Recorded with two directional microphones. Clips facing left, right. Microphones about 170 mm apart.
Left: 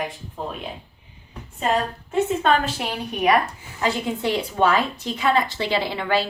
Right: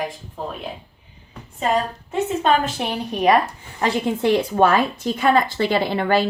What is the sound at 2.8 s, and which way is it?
Speech, 30° right (ahead or behind).